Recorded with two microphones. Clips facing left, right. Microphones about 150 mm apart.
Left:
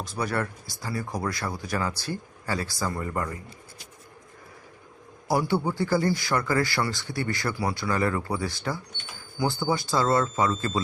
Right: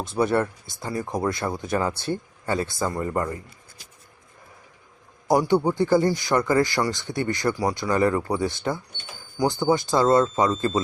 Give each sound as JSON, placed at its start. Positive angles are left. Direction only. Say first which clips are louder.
{"t": 0.0, "sound": "speech", "louder": "right 7 dB", "side_deg": -25}
{"t": 5.3, "sound": "speech", "louder": "right 5 dB", "side_deg": -20}